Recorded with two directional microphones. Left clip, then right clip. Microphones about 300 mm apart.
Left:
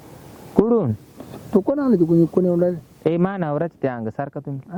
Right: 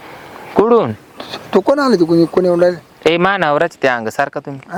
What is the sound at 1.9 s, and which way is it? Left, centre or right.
Speech, centre.